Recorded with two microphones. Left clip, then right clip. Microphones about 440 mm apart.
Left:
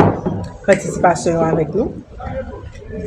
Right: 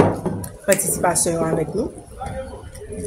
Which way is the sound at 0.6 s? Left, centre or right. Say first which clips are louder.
Left 5 dB; right.